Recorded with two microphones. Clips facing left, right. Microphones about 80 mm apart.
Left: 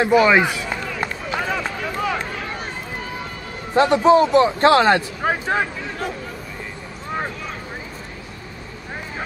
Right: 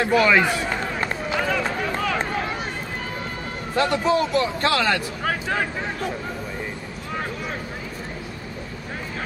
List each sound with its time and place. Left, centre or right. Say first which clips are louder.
0.0 s speech: left 3 dB; centre
0.6 s run: right 1 dB; right
1.3 s run: right 1 dB; centre
3.7 s a man's voice: left 7 dB; left